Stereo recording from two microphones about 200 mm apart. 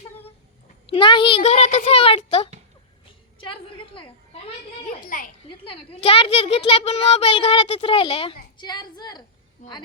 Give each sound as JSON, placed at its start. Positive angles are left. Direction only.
{"t": 0.9, "sound": "a child's voice", "side_deg": 25}
{"t": 3.4, "sound": "a sound", "side_deg": 25}
{"t": 4.9, "sound": "a child's voice", "side_deg": 45}
{"t": 5.4, "sound": "a child's voice", "side_deg": 25}